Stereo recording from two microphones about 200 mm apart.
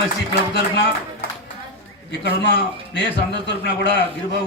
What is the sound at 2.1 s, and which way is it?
Speech, 60° left (ahead or behind).